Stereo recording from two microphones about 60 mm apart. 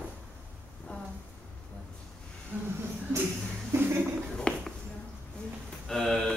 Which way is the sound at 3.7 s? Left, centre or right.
Right.